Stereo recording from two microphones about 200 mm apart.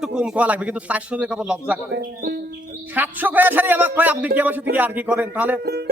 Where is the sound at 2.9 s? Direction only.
10° right (ahead or behind).